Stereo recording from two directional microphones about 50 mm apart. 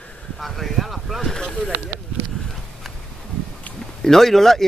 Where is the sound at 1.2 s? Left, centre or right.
Centre.